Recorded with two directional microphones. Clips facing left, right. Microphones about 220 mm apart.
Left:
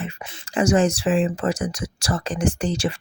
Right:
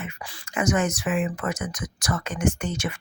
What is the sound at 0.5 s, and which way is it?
Speech, 30° left (ahead or behind).